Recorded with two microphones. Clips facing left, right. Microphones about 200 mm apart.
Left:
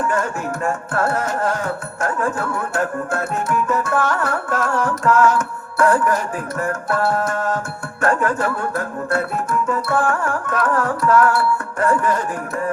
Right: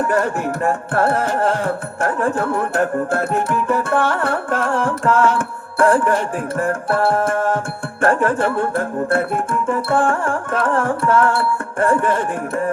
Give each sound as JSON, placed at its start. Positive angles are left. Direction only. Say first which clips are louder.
{"t": 0.0, "sound": "music", "louder": "right 3 dB", "side_deg": -35}